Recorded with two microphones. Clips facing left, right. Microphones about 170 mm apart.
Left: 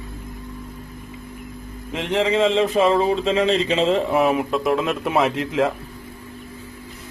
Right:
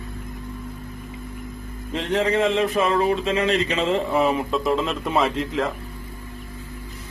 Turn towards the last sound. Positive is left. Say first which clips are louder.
# left 3 dB
turn(degrees=20)  # may be behind; listen again after turning